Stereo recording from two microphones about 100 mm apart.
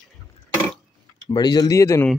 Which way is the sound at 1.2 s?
45° left (ahead or behind).